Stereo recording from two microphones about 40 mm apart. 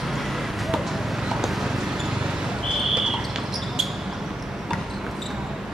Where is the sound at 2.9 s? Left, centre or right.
Centre.